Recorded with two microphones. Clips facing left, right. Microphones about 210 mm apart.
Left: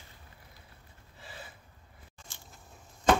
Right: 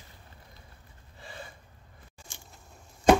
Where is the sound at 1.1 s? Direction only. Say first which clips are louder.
Right 4 dB; 5° left (ahead or behind).